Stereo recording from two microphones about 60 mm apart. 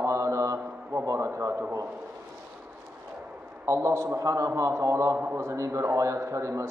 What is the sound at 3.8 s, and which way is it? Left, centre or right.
A man's voice, right.